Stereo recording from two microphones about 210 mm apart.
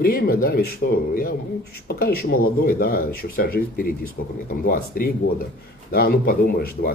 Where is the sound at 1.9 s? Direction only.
45° left (ahead or behind).